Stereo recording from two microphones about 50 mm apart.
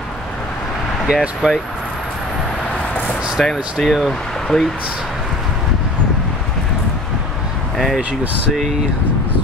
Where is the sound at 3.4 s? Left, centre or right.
Centre.